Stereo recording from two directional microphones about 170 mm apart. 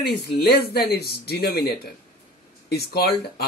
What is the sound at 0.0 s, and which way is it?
Speech, 75° left (ahead or behind).